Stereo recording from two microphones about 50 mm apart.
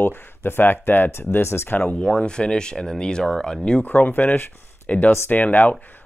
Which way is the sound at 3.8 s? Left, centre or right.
Left.